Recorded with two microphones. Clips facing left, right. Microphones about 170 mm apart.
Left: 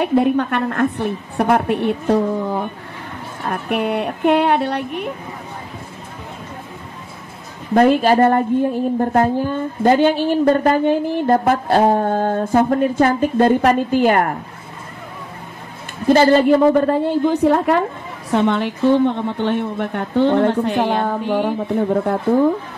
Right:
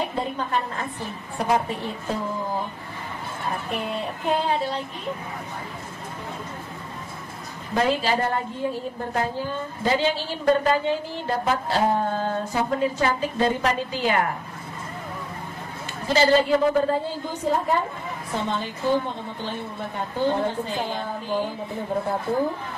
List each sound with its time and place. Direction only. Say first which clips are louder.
0.0 s a woman's voice: left 12 dB; 70° left (ahead or behind)
7.7 s a woman's voice: left 10 dB; 55° left (ahead or behind)
10.5 s a sound: left 1 dB; 55° left (ahead or behind)
16.1 s a woman's voice: left 7 dB; 55° left (ahead or behind); by 22.2 s 70° left (ahead or behind)